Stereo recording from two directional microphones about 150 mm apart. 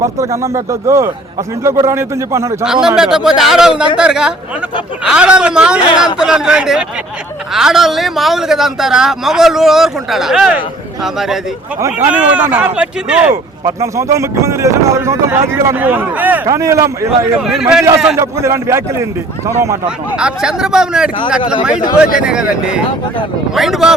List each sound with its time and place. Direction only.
0.0 s speech: 20° right (ahead or behind)
2.8 s speech: 5° right (ahead or behind)
13.3 s speech: 20° right (ahead or behind)
17.4 s speech: centre (ahead or behind)
18.2 s speech: 20° right (ahead or behind)
20.1 s speech: 5° right (ahead or behind)